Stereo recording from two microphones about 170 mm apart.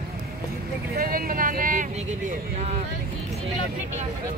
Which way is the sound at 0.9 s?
60° right (ahead or behind).